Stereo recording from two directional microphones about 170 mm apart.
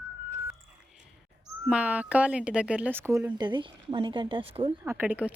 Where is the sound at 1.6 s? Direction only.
5° right (ahead or behind).